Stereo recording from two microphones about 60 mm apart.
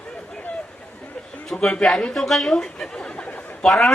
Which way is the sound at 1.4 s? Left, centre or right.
Centre.